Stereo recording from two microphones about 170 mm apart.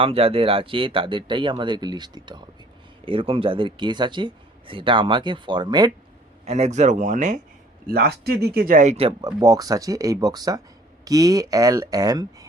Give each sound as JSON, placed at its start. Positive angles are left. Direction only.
{"t": 0.0, "sound": "a man's voice", "side_deg": -35}
{"t": 6.4, "sound": "speech", "side_deg": -40}
{"t": 7.9, "sound": "speech", "side_deg": -65}
{"t": 9.4, "sound": "a man's voice", "side_deg": -20}